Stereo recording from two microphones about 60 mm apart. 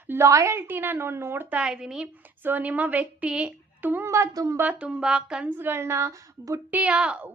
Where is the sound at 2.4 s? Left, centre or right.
Right.